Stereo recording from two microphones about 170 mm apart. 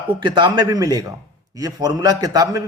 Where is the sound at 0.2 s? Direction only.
25° right (ahead or behind).